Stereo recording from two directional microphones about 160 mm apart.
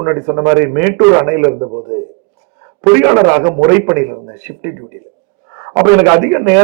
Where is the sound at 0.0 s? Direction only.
20° right (ahead or behind).